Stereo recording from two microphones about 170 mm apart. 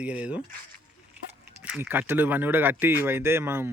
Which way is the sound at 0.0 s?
5° right (ahead or behind).